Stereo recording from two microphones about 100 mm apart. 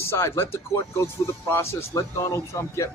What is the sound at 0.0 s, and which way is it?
Speech, 25° left (ahead or behind).